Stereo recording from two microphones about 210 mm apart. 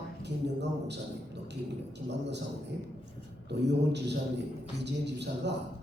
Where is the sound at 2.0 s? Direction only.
55° right (ahead or behind).